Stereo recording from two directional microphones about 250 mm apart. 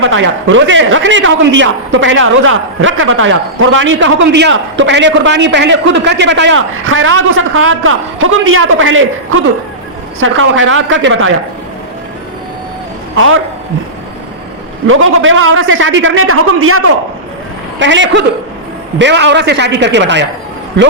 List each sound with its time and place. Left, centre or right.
0.0 s a man's voice: right
13.1 s a man's voice: right
14.8 s a man's voice: right